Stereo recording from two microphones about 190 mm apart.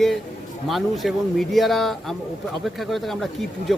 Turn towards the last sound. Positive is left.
turn(degrees=0)  # may be behind; listen again after turning